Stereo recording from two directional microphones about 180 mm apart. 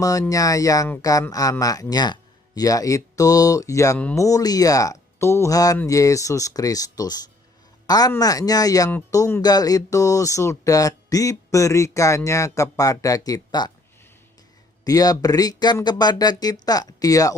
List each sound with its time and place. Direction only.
0.0 s speech: 20° left (ahead or behind)
14.8 s speech: 20° left (ahead or behind)